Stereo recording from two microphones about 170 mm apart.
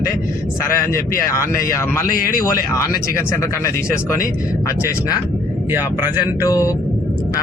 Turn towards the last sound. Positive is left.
turn(degrees=20)  # may be behind; listen again after turning